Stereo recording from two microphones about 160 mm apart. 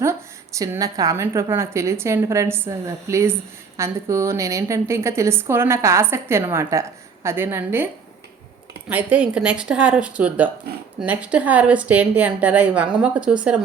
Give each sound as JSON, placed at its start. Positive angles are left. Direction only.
{"t": 0.5, "sound": "a woman's voice", "side_deg": -20}
{"t": 8.9, "sound": "a woman's voice", "side_deg": -10}